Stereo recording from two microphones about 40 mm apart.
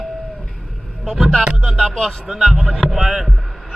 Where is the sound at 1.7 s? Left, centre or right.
Centre.